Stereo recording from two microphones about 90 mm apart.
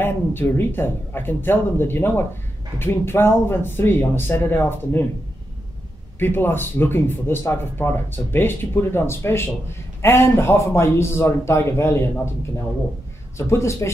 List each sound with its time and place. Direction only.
0.0 s speech: 25° left (ahead or behind)
6.1 s speech: 25° left (ahead or behind)
13.4 s speech: 30° left (ahead or behind)